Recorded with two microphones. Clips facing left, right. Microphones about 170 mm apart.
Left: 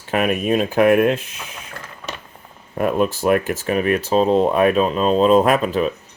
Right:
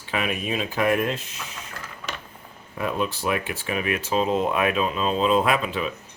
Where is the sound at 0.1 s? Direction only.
50° left (ahead or behind).